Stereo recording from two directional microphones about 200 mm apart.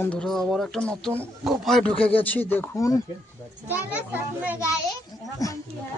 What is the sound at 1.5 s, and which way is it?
Speech, centre (ahead or behind).